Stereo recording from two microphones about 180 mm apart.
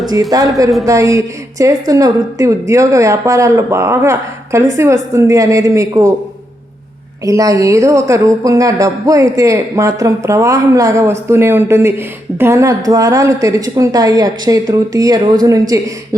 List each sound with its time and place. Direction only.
0.1 s speech: 20° right (ahead or behind)
7.3 s speech: 20° right (ahead or behind)